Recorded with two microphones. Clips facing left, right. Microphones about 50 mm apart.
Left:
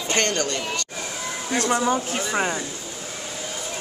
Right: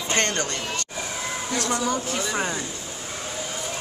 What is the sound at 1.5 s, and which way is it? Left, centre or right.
Speech, left.